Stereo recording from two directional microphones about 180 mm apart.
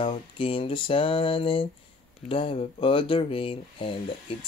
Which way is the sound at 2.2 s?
30° left (ahead or behind).